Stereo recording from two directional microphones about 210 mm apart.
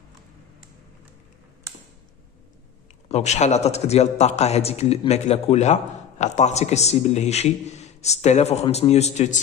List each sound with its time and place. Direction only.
3.1 s a man's voice: 30° left (ahead or behind)